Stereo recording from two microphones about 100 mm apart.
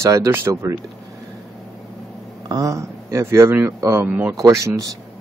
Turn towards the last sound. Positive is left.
turn(degrees=-35)  # may be behind; listen again after turning